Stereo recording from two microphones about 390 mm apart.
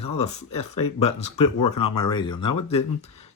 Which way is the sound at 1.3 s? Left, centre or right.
Left.